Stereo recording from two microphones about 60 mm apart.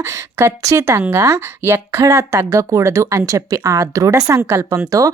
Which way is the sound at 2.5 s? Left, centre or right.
Right.